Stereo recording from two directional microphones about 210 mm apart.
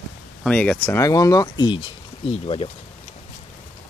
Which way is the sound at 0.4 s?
5° left (ahead or behind).